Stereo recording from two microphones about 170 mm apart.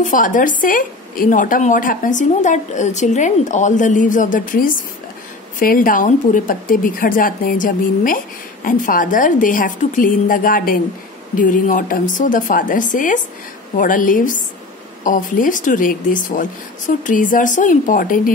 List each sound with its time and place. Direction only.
0.0 s speech: 50° left (ahead or behind)